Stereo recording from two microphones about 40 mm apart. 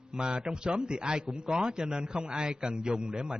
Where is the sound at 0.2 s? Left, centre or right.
Right.